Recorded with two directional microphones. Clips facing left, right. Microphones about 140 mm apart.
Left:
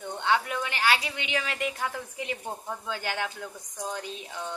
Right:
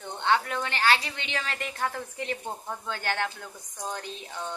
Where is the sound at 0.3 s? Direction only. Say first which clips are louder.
Right 1 dB; 10° left (ahead or behind).